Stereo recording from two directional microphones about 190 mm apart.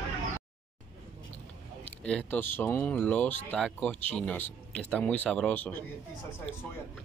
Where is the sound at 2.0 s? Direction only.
5° left (ahead or behind).